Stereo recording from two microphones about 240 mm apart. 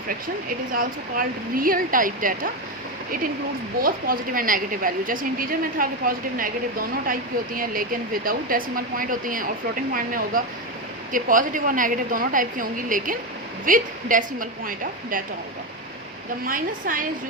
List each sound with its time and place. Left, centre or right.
0.7 s a woman's voice: right
3.8 s a woman's voice: right
16.5 s a woman's voice: right